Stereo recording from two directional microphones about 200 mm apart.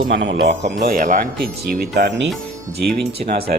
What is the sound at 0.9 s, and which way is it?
Speech, 40° right (ahead or behind).